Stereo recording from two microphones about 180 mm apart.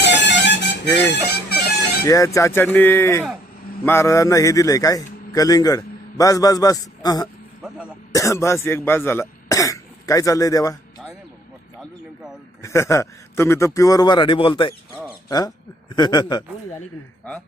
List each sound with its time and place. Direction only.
0.0 s music: 80° left
1.3 s bagpipes: 65° left (ahead or behind)
2.0 s a man's voice: 20° left (ahead or behind)
12.6 s a man's voice: 15° left (ahead or behind)